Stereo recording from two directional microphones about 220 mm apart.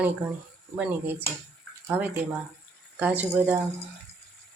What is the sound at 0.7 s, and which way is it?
Speech, 5° right (ahead or behind).